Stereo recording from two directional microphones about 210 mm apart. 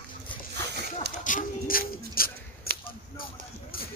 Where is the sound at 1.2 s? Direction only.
40° left (ahead or behind).